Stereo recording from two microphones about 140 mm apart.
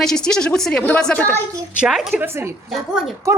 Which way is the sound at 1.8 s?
5° right (ahead or behind).